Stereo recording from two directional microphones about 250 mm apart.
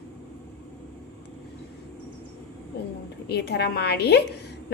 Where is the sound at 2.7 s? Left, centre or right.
Left.